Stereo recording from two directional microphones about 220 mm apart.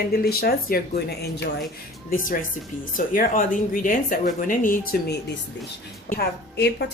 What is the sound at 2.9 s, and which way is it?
Speech, 40° left (ahead or behind).